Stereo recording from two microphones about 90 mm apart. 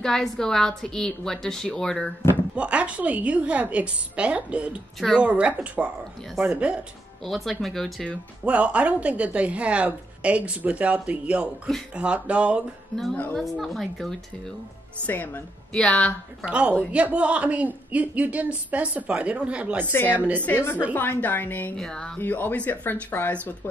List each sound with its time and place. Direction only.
0.0 s a woman's voice: 5° left (ahead or behind)
2.5 s a woman's voice: 15° right (ahead or behind)
7.2 s a woman's voice: centre (ahead or behind)
8.5 s a woman's voice: 15° right (ahead or behind)
12.9 s a woman's voice: 5° left (ahead or behind)
15.0 s speech: 20° left (ahead or behind)
15.7 s speech: 10° left (ahead or behind)
16.4 s a woman's voice: 10° right (ahead or behind)
19.9 s speech: 25° left (ahead or behind)
20.2 s a woman's voice: 15° right (ahead or behind)
20.4 s speech: 20° left (ahead or behind)
21.7 s speech: 5° left (ahead or behind)
22.2 s speech: 20° left (ahead or behind)